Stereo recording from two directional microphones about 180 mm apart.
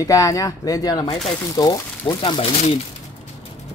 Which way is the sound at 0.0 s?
20° left (ahead or behind).